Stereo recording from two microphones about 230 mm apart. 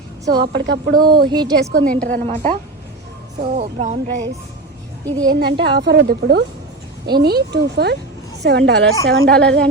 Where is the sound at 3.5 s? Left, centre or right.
Right.